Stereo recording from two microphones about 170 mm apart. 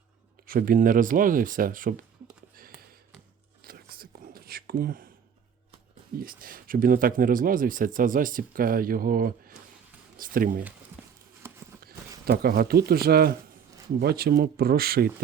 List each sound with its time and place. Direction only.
0.4 s speech: 55° right (ahead or behind)
3.6 s whispering: 60° right (ahead or behind)
6.1 s speech: 55° right (ahead or behind)
12.2 s speech: 65° right (ahead or behind)